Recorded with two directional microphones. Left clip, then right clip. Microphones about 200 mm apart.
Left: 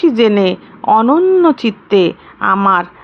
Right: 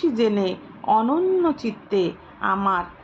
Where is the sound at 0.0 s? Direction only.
30° left (ahead or behind).